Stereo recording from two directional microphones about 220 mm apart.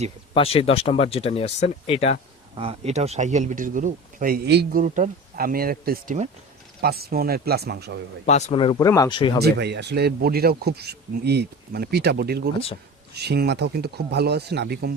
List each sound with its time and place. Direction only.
0.3 s speech: 25° left (ahead or behind)
2.6 s speech: 25° right (ahead or behind); by 7.9 s 45° right (ahead or behind)
8.3 s speech: 30° left (ahead or behind)
9.4 s speech: 50° right (ahead or behind)